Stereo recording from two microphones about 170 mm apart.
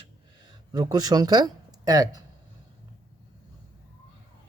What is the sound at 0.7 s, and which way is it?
Speech, 20° right (ahead or behind).